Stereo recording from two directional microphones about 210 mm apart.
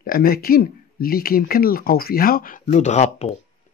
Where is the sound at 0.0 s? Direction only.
45° left (ahead or behind).